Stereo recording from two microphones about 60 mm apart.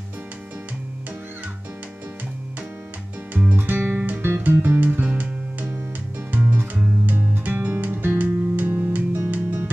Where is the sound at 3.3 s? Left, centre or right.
Right.